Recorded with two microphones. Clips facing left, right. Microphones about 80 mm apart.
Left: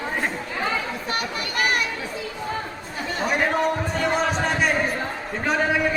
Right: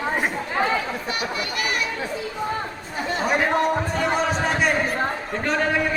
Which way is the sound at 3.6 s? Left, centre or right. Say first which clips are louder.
Right 1 dB; centre.